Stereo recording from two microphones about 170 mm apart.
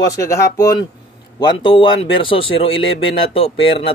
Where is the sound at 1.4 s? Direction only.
30° left (ahead or behind).